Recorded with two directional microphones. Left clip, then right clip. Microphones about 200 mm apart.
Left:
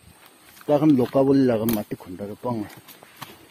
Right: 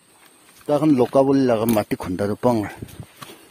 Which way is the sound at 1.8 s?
50° right (ahead or behind).